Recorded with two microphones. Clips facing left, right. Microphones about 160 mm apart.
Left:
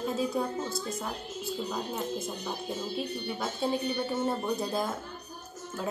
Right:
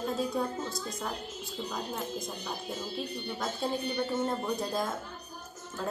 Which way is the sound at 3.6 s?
5° left (ahead or behind).